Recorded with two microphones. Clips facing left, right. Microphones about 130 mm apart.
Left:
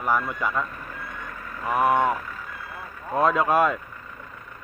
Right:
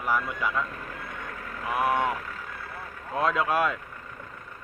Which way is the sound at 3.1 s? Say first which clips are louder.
Left 5 dB; centre (ahead or behind).